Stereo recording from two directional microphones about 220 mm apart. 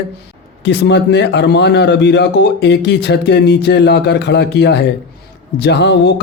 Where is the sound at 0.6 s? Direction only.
50° left (ahead or behind).